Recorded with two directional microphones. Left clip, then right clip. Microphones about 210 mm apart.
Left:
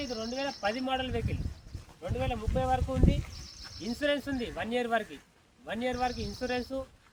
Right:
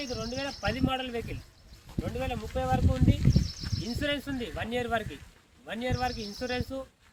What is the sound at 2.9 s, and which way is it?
Speech, 20° right (ahead or behind).